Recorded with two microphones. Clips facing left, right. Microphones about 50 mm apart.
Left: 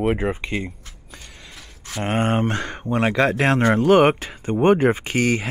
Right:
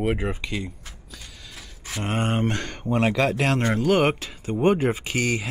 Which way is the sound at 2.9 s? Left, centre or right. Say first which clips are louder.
Left 1 dB; centre.